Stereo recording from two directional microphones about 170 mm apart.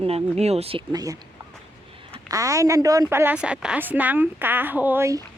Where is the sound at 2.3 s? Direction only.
20° right (ahead or behind).